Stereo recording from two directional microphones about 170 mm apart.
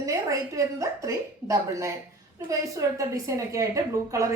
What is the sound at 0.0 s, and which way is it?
A woman's voice, 20° right (ahead or behind).